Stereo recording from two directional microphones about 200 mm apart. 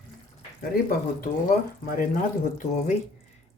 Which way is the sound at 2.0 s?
40° left (ahead or behind).